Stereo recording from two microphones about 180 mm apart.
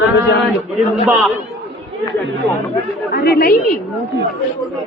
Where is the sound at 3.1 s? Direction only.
60° left (ahead or behind).